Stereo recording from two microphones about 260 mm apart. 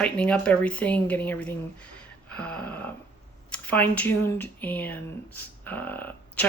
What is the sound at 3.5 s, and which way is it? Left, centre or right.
Speech, centre.